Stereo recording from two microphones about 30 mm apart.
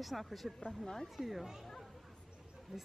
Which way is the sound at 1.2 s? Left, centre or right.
Centre.